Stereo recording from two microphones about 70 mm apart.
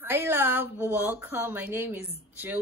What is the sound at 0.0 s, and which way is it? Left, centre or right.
A woman's voice, right.